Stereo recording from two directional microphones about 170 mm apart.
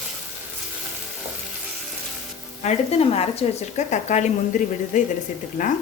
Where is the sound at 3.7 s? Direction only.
45° left (ahead or behind).